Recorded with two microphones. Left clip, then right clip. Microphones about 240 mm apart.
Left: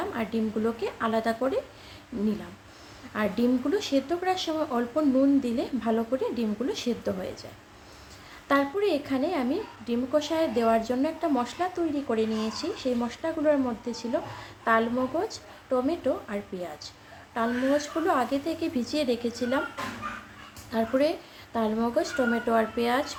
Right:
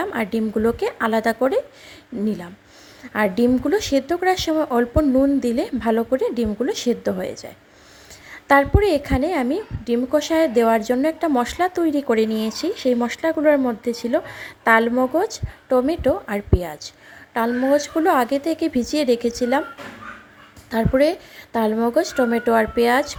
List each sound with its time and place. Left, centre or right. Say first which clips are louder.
0.0 s a woman's voice: right 7 dB; right
3.1 s a woman's voice: right 8 dB; right
8.4 s a woman's voice: right 9 dB; right
20.7 s a woman's voice: right 7 dB; right